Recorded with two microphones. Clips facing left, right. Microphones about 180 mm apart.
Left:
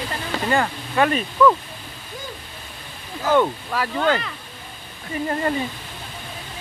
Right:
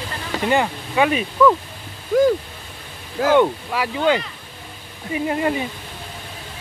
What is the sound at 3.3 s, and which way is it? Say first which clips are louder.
Speech: right 1 dB; 10° right (ahead or behind).